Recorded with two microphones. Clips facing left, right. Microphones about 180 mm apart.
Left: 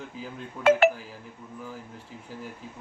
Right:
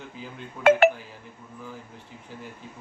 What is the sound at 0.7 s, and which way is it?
Speech, 60° right (ahead or behind).